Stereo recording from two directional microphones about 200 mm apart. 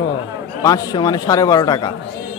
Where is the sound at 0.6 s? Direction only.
20° left (ahead or behind).